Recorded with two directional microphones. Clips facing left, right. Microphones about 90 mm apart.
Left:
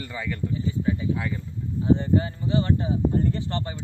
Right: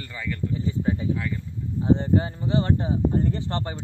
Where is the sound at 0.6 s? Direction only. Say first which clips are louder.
Even; 35° right (ahead or behind).